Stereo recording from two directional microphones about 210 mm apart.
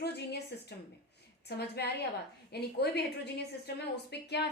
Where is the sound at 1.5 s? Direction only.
50° left (ahead or behind).